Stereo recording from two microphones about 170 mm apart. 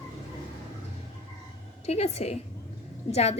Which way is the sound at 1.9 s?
40° left (ahead or behind).